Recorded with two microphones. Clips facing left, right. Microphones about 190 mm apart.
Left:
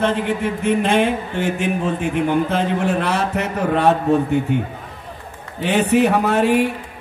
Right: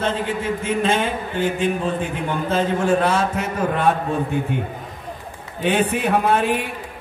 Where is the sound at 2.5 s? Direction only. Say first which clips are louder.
Right 1 dB; 60° left (ahead or behind).